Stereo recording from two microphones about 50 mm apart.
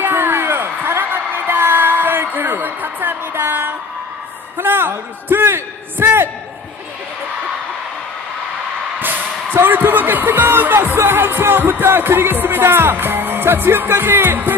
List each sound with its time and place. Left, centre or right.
0.0 s music: right
4.6 s a man's voice: right
9.0 s speech: right